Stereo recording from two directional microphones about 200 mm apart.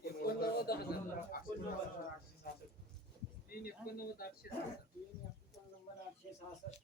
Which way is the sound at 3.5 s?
50° left (ahead or behind).